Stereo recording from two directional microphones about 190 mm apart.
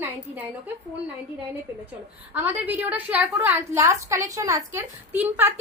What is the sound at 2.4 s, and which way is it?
A woman's voice, 10° right (ahead or behind).